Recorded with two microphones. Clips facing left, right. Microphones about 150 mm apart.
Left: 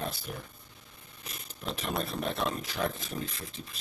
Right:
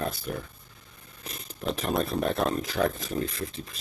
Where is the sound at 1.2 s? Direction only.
40° right (ahead or behind).